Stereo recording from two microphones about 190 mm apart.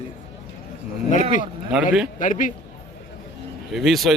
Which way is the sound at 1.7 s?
5° right (ahead or behind).